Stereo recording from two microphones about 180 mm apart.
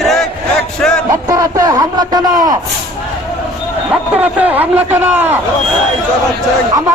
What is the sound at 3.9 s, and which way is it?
A man's voice, 10° right (ahead or behind).